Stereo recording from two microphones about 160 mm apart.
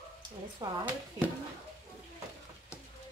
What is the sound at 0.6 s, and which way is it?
Speech, 30° right (ahead or behind).